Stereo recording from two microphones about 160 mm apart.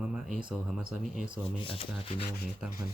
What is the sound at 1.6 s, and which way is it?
Speech, 35° left (ahead or behind).